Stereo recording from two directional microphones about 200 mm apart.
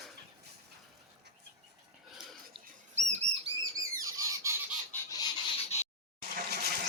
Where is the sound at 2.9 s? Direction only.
35° right (ahead or behind).